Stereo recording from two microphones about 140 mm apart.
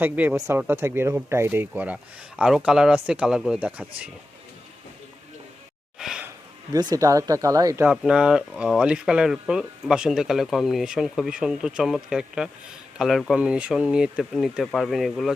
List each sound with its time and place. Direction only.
0.0 s speech: 10° right (ahead or behind)
6.0 s gasp: 5° right (ahead or behind)
6.7 s speech: 25° right (ahead or behind)
7.9 s speech: 5° right (ahead or behind)